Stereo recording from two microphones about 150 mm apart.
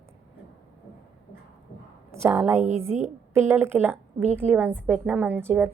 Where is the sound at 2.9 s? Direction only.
50° right (ahead or behind).